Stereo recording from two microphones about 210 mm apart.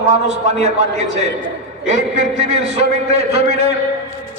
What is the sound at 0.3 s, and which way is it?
A man's voice, 30° right (ahead or behind).